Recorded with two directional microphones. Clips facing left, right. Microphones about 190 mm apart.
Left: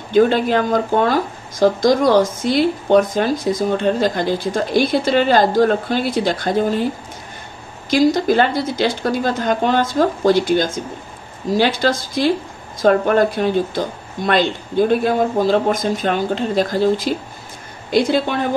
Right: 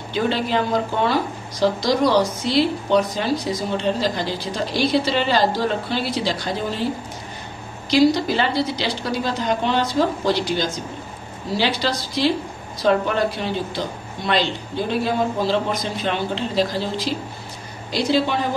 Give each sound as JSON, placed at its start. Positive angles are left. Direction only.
{"t": 0.1, "sound": "a woman's voice", "side_deg": 50}
{"t": 7.9, "sound": "a woman's voice", "side_deg": 50}